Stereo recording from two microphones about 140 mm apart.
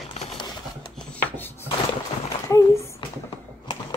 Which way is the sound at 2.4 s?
20° left (ahead or behind).